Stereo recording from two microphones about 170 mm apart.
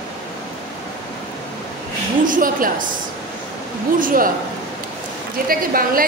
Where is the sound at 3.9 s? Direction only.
55° right (ahead or behind).